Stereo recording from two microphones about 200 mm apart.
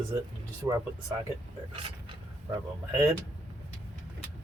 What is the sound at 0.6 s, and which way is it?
Speech, 15° right (ahead or behind).